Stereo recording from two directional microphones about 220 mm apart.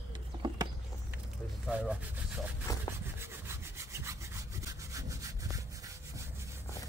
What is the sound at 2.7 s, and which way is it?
Rub, 15° left (ahead or behind).